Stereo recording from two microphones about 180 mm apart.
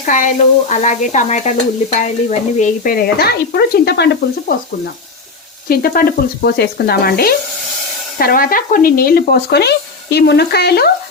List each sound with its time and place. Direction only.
0.0 s speech: 45° left (ahead or behind)
0.7 s stir: 45° left (ahead or behind); by 4.5 s 70° left (ahead or behind)
5.6 s speech: 55° left (ahead or behind)